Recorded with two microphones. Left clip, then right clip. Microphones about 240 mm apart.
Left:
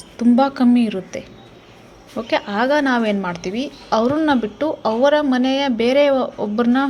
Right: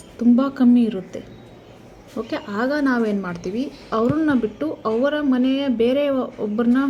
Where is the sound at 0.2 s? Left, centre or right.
Left.